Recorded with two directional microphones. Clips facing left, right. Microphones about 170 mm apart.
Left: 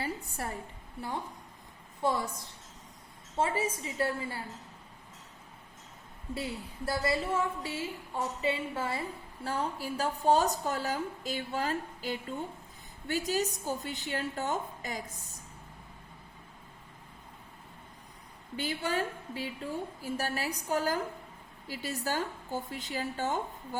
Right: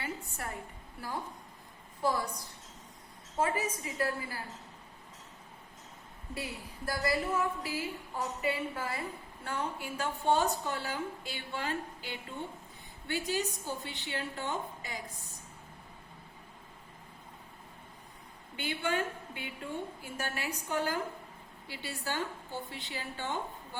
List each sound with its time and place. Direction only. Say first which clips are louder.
0.0 s a sound: left 3 dB; 35° left (ahead or behind)
2.0 s a woman's voice: left 1 dB; 25° left (ahead or behind)
3.3 s a woman's voice: left 1 dB; 30° left (ahead or behind)
6.3 s a woman's voice: left 4 dB; 25° left (ahead or behind); by 15.0 s 45° left (ahead or behind)
18.5 s a woman's voice: left 1 dB; 35° left (ahead or behind)